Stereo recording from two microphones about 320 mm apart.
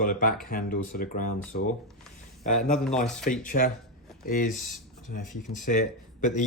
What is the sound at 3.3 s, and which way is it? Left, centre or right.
Speech, left.